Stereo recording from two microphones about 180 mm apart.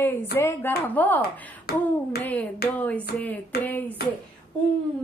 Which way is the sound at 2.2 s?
10° left (ahead or behind).